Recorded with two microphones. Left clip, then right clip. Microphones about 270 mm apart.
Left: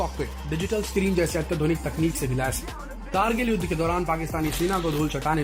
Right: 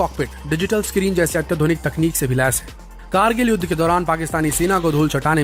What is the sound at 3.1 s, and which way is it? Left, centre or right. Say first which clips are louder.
Speech: right 7 dB; right.